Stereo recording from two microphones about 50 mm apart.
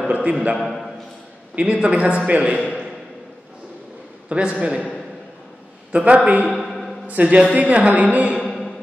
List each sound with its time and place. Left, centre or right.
0.1 s speech: right
4.3 s speech: right
5.9 s speech: right
6.6 s a sound: centre
7.1 s speech: right
8.4 s music: centre